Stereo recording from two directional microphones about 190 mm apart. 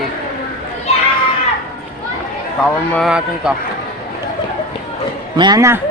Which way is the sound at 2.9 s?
Centre (ahead or behind).